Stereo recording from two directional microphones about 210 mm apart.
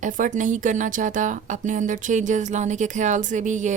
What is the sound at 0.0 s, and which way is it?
A woman's voice, 35° right (ahead or behind).